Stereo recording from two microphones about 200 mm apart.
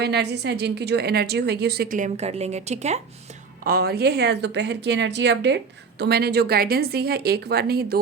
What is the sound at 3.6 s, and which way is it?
Speech, 50° right (ahead or behind).